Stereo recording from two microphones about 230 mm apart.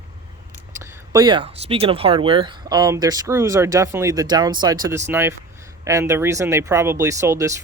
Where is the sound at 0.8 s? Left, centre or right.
Centre.